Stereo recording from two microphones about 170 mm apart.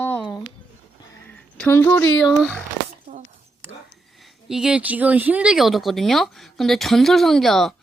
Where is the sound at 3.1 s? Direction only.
60° right (ahead or behind).